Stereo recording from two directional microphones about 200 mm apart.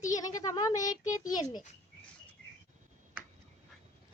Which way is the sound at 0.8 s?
40° left (ahead or behind).